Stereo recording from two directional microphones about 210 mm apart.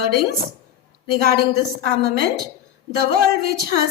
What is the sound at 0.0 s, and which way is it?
A woman's voice, 45° right (ahead or behind).